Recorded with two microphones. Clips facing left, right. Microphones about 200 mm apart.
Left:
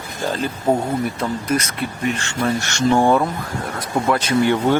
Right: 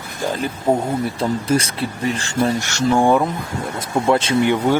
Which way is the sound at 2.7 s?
10° right (ahead or behind).